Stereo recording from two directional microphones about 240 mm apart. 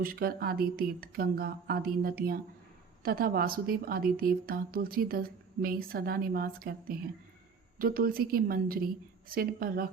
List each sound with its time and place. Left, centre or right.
0.0 s speech: right